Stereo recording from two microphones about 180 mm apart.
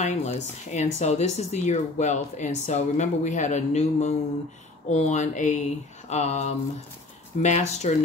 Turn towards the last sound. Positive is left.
turn(degrees=40)  # may be behind; listen again after turning